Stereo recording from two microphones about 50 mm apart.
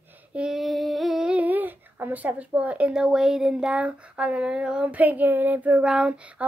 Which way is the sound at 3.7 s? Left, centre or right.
Right.